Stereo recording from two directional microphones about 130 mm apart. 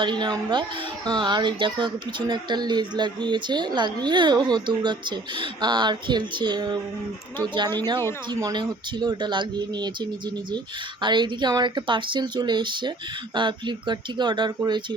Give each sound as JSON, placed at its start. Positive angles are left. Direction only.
{"t": 0.0, "sound": "speech", "side_deg": -35}